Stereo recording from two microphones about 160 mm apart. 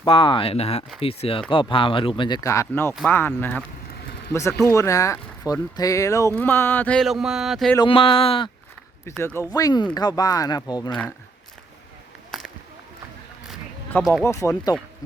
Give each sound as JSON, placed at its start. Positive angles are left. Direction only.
{"t": 0.0, "sound": "speech", "side_deg": 30}
{"t": 6.3, "sound": "a sound", "side_deg": 10}
{"t": 7.8, "sound": "speech", "side_deg": 35}
{"t": 9.0, "sound": "speech", "side_deg": 15}
{"t": 13.9, "sound": "speech", "side_deg": 10}